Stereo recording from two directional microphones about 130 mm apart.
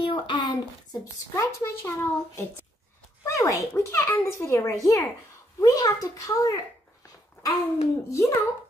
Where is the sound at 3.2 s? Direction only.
25° left (ahead or behind).